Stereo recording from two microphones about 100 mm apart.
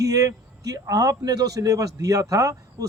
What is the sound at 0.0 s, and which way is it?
A man's voice, 35° right (ahead or behind).